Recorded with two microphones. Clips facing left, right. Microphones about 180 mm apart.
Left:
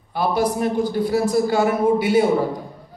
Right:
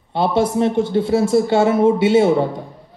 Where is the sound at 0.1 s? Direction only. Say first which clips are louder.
Right 3 dB; 25° right (ahead or behind).